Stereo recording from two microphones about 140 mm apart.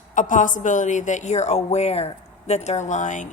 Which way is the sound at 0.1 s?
65° left (ahead or behind).